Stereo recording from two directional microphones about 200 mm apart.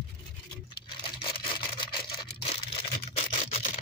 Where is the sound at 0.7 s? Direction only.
25° left (ahead or behind).